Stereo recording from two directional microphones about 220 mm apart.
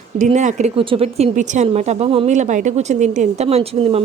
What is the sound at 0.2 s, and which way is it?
A woman's voice, 35° right (ahead or behind).